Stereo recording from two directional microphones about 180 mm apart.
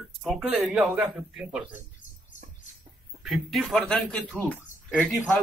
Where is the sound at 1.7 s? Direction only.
45° left (ahead or behind).